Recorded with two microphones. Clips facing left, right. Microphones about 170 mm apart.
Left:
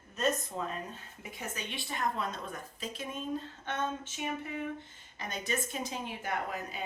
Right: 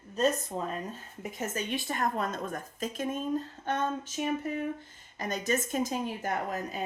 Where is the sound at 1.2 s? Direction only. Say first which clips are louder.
Right 7 dB; 45° right (ahead or behind).